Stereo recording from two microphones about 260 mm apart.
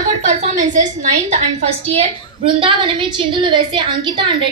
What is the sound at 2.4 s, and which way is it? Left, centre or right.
A woman's voice, right.